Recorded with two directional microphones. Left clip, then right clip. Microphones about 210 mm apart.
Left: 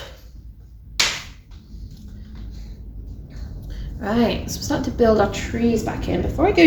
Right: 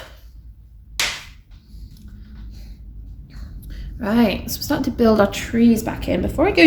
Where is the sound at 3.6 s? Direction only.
30° right (ahead or behind).